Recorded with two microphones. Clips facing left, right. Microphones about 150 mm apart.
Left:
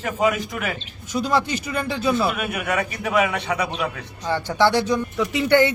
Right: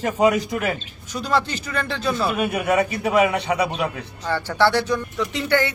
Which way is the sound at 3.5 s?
25° right (ahead or behind).